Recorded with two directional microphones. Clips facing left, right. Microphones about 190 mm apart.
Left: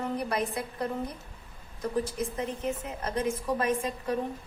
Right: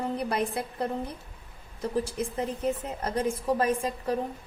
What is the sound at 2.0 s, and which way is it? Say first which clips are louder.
A woman's voice: right 1 dB; 30° right (ahead or behind).